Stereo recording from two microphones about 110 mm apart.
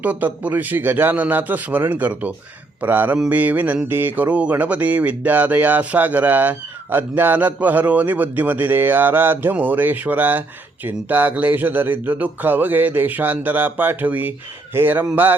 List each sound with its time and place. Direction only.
0.0 s speech: 15° right (ahead or behind)